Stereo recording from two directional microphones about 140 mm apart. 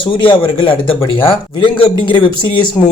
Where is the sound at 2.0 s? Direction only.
35° left (ahead or behind).